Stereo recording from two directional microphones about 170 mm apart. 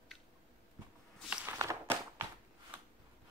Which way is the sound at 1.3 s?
10° right (ahead or behind).